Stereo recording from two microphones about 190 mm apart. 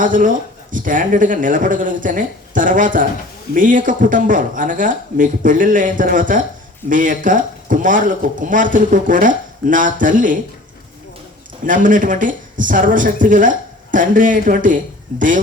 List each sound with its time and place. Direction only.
0.0 s speech: 45° right (ahead or behind)
11.6 s speech: 45° right (ahead or behind)